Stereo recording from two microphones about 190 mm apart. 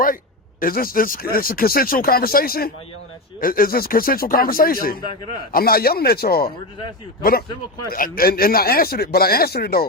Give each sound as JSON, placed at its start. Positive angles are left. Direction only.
{"t": 0.6, "sound": "speech", "side_deg": 50}